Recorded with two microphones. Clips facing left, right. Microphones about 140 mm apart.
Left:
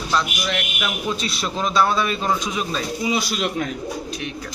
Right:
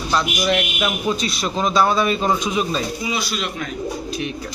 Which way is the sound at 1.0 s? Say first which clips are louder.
Right 3 dB; centre (ahead or behind).